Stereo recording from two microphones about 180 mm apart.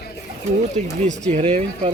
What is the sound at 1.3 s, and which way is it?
Speech, 35° right (ahead or behind).